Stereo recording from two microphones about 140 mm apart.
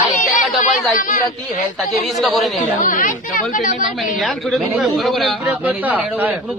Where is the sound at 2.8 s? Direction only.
70° left (ahead or behind).